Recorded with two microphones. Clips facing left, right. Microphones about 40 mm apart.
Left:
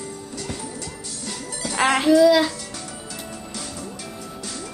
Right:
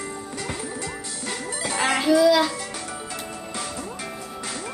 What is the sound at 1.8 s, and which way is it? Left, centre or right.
Music, left.